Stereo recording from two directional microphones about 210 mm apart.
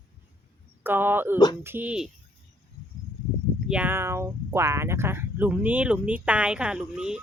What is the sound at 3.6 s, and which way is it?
Speech, 5° right (ahead or behind).